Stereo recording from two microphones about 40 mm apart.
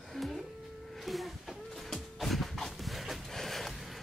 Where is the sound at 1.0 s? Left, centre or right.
Centre.